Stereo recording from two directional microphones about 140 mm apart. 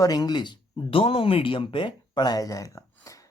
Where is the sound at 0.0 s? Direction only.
30° left (ahead or behind).